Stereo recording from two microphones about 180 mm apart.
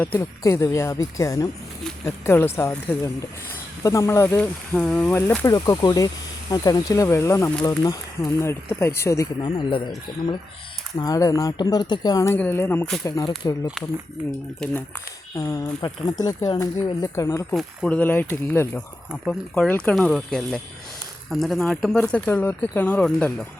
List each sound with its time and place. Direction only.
0.2 s speech: 15° left (ahead or behind)
10.1 s speech: 55° left (ahead or behind)
10.9 s speech: 20° left (ahead or behind)
14.6 s speech: 10° left (ahead or behind)
17.5 s speech: 5° left (ahead or behind)